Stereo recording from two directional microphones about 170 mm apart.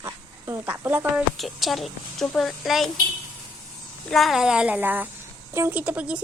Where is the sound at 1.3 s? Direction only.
Centre (ahead or behind).